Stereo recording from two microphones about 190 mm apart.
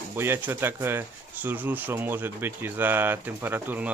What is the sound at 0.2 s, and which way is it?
Speech, 10° right (ahead or behind).